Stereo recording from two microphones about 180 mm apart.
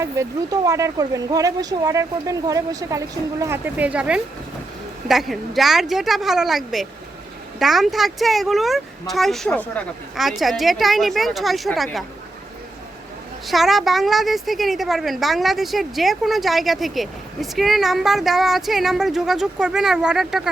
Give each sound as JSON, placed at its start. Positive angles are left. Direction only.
{"t": 0.0, "sound": "a woman's voice", "side_deg": -20}
{"t": 13.5, "sound": "a woman's voice", "side_deg": 0}